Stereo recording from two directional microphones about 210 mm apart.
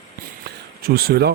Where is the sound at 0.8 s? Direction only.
45° right (ahead or behind).